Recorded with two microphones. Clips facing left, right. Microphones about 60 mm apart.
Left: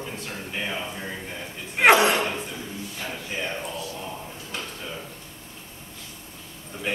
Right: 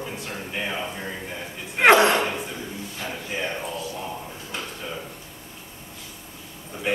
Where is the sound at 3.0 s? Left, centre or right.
Centre.